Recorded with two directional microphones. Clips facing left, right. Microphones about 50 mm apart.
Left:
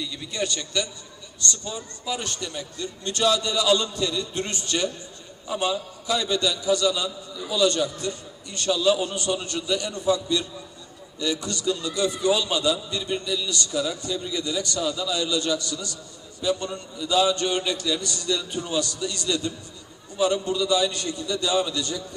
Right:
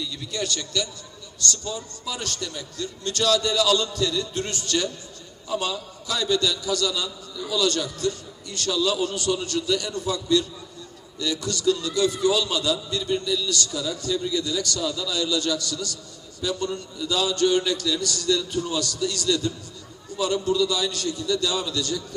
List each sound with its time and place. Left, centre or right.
0.3 s a man's voice: left